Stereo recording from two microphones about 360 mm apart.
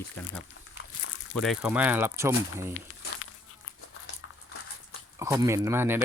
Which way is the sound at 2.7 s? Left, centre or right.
Left.